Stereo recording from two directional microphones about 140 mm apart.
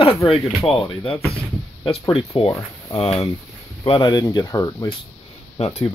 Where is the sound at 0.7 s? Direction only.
40° left (ahead or behind).